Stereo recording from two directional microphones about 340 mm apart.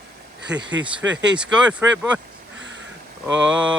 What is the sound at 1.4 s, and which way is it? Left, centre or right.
Speech, centre.